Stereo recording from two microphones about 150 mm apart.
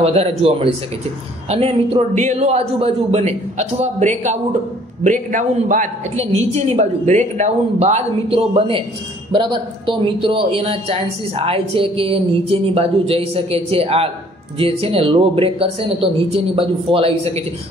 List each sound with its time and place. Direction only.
0.0 s a woman's voice: 45° right (ahead or behind)